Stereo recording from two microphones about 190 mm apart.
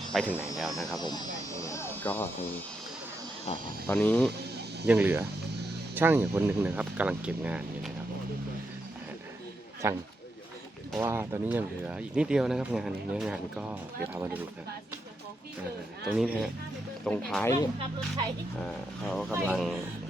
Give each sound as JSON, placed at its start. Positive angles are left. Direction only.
{"t": 0.1, "sound": "speech", "side_deg": 0}
{"t": 0.9, "sound": "speech", "side_deg": 20}
{"t": 3.8, "sound": "speech", "side_deg": 10}
{"t": 4.9, "sound": "speech", "side_deg": -10}
{"t": 9.8, "sound": "speech", "side_deg": -15}
{"t": 16.1, "sound": "speech", "side_deg": 0}
{"t": 17.4, "sound": "speech", "side_deg": 15}
{"t": 18.6, "sound": "speech", "side_deg": 0}